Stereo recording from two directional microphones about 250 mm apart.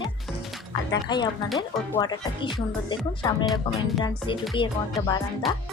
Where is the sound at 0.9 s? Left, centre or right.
Centre.